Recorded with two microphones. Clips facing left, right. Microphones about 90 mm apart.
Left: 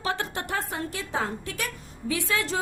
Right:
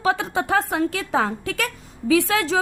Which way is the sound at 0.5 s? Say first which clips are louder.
Right 12 dB; 90° right.